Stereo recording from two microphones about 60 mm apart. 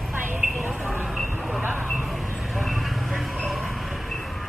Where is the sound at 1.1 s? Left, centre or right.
Centre.